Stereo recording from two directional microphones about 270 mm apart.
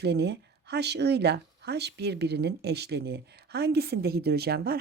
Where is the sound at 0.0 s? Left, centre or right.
Right.